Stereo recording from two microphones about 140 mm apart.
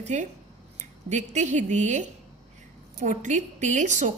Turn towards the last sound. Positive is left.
turn(degrees=-60)  # may be behind; listen again after turning